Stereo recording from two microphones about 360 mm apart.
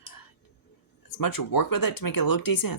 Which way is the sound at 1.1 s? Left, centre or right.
Left.